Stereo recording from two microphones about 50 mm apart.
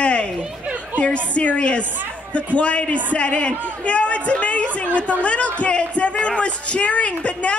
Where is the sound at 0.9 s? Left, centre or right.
Left.